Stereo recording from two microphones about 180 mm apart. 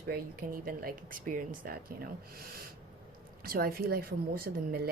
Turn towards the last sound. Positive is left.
turn(degrees=-60)  # may be behind; listen again after turning